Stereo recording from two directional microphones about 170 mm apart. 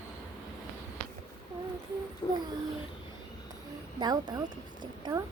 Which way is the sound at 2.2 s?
25° left (ahead or behind).